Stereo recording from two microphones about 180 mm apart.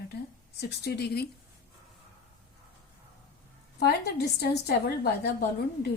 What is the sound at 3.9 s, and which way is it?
A woman's voice, 65° left (ahead or behind).